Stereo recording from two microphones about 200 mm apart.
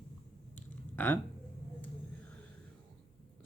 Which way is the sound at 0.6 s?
10° left (ahead or behind).